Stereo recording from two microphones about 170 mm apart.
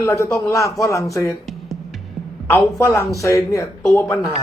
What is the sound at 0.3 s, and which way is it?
Speech, 20° left (ahead or behind).